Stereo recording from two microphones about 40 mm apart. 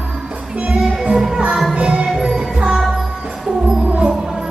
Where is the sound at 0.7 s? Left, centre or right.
Centre.